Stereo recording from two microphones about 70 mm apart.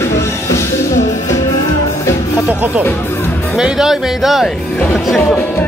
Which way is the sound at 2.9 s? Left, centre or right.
Left.